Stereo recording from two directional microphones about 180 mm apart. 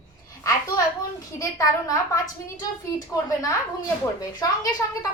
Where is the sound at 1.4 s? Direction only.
20° left (ahead or behind).